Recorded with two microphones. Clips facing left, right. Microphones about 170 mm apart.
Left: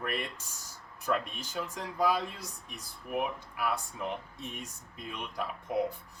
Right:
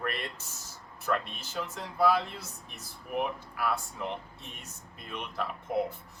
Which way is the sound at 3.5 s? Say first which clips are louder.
Right 2 dB; 15° left (ahead or behind).